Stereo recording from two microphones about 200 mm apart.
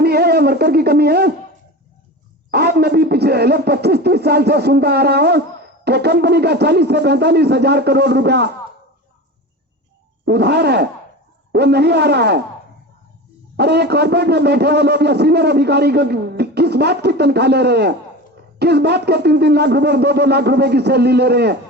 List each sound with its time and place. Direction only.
0.0 s speech: 55° right (ahead or behind)
2.5 s a man's voice: 55° right (ahead or behind)
10.2 s a man's voice: 55° right (ahead or behind)
13.6 s a man's voice: 55° right (ahead or behind)